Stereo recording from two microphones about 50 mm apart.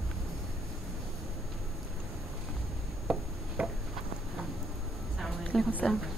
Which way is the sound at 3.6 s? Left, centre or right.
Right.